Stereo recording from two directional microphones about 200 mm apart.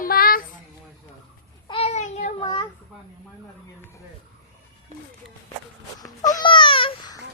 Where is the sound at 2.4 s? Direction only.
20° left (ahead or behind).